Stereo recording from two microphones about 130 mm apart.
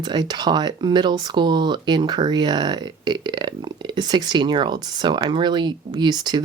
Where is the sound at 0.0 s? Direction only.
35° right (ahead or behind).